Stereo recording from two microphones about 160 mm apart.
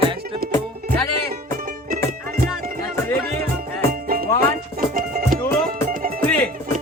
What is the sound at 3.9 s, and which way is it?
Music, 65° right (ahead or behind).